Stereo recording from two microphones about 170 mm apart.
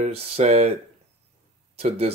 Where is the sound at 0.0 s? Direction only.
40° right (ahead or behind).